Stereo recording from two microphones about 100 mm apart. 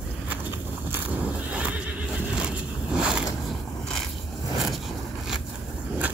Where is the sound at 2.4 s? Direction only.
10° right (ahead or behind).